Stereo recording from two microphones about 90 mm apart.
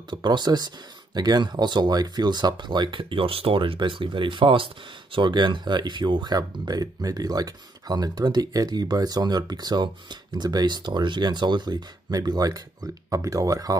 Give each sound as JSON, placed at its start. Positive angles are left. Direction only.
{"t": 0.1, "sound": "speech", "side_deg": -55}
{"t": 5.1, "sound": "speech", "side_deg": -60}